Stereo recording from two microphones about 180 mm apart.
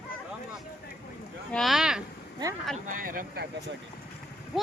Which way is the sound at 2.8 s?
50° right (ahead or behind).